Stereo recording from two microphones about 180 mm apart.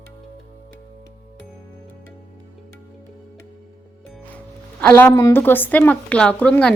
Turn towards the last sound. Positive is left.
turn(degrees=5)  # may be behind; listen again after turning